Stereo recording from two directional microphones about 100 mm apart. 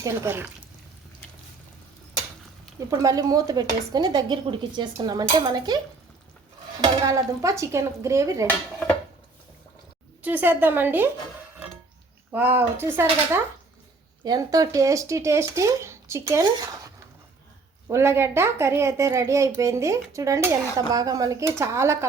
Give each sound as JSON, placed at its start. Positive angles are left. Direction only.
{"t": 0.0, "sound": "speech", "side_deg": -35}
{"t": 2.9, "sound": "speech", "side_deg": -35}
{"t": 4.4, "sound": "dishes", "side_deg": -50}
{"t": 6.8, "sound": "speech", "side_deg": -35}
{"t": 8.4, "sound": "dishes", "side_deg": 15}
{"t": 10.2, "sound": "a woman's voice", "side_deg": -20}
{"t": 12.3, "sound": "a woman's voice", "side_deg": -20}
{"t": 14.3, "sound": "speech", "side_deg": -40}
{"t": 17.8, "sound": "a woman's voice", "side_deg": -30}